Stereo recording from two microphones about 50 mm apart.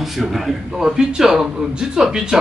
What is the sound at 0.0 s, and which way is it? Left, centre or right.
Speech, centre.